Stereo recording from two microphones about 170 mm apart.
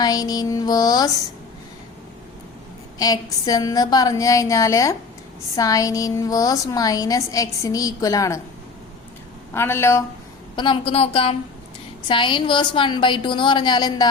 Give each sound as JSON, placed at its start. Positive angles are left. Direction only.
{"t": 0.0, "sound": "music", "side_deg": 20}
{"t": 3.0, "sound": "a woman's voice", "side_deg": 20}
{"t": 9.6, "sound": "speech", "side_deg": 15}
{"t": 10.5, "sound": "a woman's voice", "side_deg": 30}